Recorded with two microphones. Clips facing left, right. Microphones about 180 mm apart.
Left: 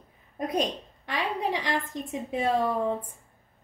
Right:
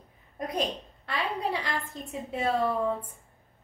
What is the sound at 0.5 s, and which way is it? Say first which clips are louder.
A woman's voice: left 2 dB; 15° left (ahead or behind).